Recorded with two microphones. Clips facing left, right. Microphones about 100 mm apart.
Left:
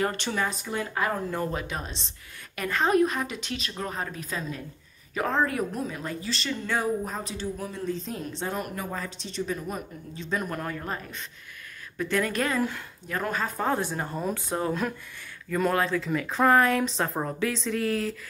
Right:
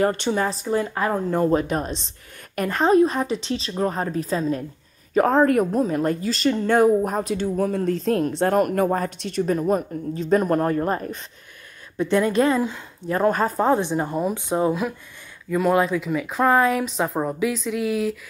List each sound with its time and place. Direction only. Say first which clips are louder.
0.0 s a woman's voice: right 7 dB; 30° right (ahead or behind)
1.5 s a woman's voice: right 11 dB; 40° right (ahead or behind)
6.8 s speech: right 11 dB; 60° right (ahead or behind); by 11.2 s 40° right (ahead or behind)
12.0 s speech: right 8 dB; 25° right (ahead or behind)
13.3 s a woman's voice: right 8 dB; 40° right (ahead or behind)
13.6 s speech: right 7 dB; 20° right (ahead or behind)
14.7 s a woman's voice: right 5 dB; 5° right (ahead or behind)